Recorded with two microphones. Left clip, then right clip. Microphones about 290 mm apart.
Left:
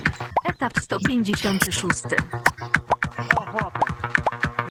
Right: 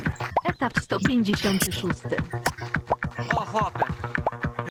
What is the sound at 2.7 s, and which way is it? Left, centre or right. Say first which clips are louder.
Music: left 5 dB; left.